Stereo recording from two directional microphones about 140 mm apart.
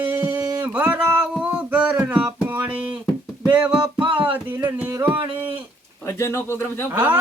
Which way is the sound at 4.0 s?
10° right (ahead or behind).